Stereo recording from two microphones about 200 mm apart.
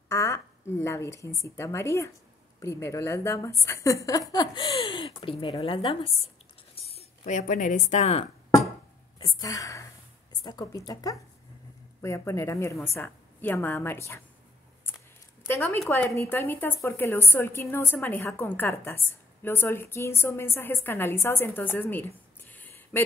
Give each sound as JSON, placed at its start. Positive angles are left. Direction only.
{"t": 0.1, "sound": "a woman's voice", "side_deg": 15}
{"t": 9.2, "sound": "a woman's voice", "side_deg": 15}
{"t": 14.9, "sound": "a sound", "side_deg": 10}
{"t": 15.4, "sound": "a woman's voice", "side_deg": 10}